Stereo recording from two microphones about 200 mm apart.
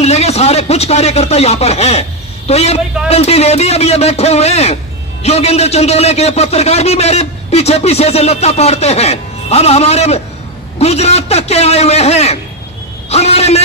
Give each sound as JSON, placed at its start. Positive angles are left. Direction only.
{"t": 0.0, "sound": "a man's voice", "side_deg": 30}